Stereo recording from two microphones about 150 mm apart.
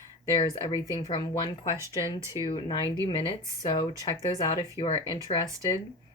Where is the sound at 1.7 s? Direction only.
20° right (ahead or behind).